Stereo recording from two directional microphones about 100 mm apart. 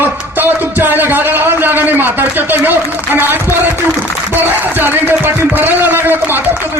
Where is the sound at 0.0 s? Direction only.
20° right (ahead or behind).